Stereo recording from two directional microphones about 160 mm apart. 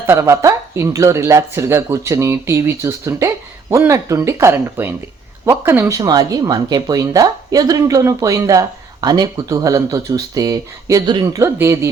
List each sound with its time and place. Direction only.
0.0 s speech: 15° right (ahead or behind)